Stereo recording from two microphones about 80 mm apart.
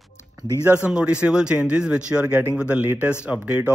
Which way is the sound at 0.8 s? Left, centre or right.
Centre.